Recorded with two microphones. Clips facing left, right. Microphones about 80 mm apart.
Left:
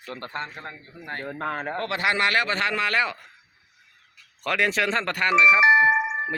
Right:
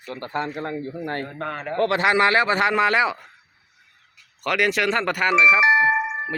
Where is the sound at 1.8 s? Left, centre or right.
Right.